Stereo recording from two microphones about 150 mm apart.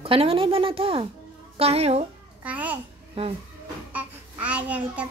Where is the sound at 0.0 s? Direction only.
40° right (ahead or behind).